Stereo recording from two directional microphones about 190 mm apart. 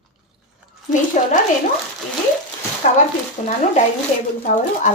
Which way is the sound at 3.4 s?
40° left (ahead or behind).